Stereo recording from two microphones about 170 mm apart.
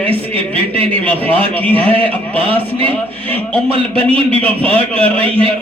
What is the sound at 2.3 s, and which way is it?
Mantra, 35° right (ahead or behind).